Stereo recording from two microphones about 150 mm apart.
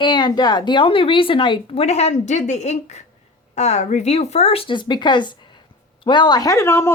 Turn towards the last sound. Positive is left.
turn(degrees=15)  # may be behind; listen again after turning